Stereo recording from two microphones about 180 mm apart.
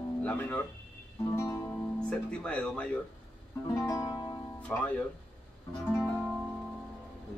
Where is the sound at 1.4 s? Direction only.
15° left (ahead or behind).